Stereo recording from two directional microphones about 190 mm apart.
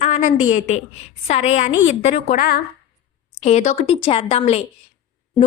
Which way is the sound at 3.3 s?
35° left (ahead or behind).